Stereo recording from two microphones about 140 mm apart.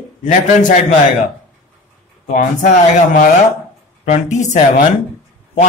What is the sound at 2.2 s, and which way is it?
A man's voice, 65° left (ahead or behind).